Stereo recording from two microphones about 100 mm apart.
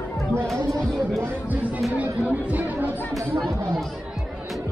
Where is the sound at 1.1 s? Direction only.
20° right (ahead or behind).